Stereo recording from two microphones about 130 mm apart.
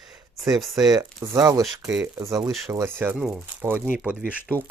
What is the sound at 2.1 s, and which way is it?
Speech, 25° right (ahead or behind).